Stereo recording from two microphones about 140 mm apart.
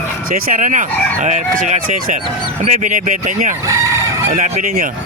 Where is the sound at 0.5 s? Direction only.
65° right (ahead or behind).